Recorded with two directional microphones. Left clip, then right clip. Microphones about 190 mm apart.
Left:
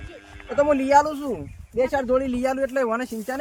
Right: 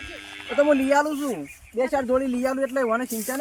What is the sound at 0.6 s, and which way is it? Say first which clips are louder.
Speech: left 3 dB; 30° left (ahead or behind).